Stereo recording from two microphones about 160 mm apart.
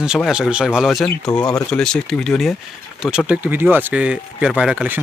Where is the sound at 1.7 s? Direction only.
5° left (ahead or behind).